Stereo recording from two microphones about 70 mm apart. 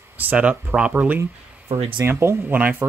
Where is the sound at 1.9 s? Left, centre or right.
Right.